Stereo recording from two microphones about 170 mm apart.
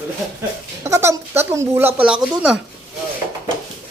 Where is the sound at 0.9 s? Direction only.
15° right (ahead or behind).